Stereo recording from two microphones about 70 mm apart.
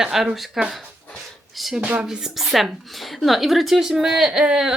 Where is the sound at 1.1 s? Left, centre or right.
Centre.